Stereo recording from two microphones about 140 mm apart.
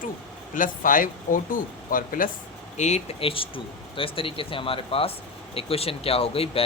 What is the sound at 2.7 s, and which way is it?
Speech, 55° left (ahead or behind).